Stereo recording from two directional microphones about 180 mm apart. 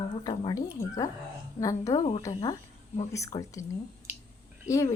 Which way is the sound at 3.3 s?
25° left (ahead or behind).